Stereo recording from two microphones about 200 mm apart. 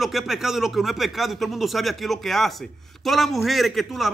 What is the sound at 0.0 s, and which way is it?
A man's voice, centre (ahead or behind).